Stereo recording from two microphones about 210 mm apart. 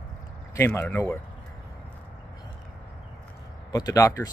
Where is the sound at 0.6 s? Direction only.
10° left (ahead or behind).